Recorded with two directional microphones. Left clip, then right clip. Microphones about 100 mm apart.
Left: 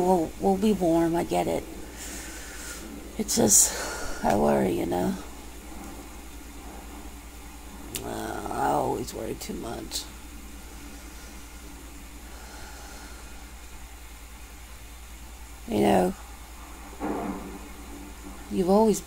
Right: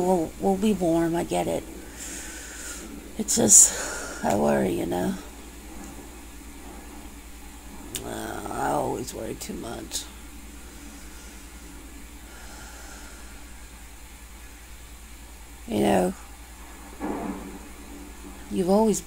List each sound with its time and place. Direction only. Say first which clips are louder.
0.0 s speech: even; 15° right (ahead or behind)
7.9 s a sound: even; 15° right (ahead or behind)
15.7 s speech: even; 20° right (ahead or behind)
18.5 s speech: even; 20° right (ahead or behind)